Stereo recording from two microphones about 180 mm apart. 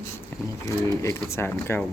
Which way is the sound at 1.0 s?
15° left (ahead or behind).